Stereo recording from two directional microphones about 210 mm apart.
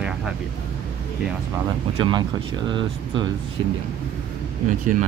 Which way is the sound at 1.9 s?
25° right (ahead or behind).